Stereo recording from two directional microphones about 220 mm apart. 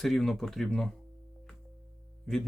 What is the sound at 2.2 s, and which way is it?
Speech, centre (ahead or behind).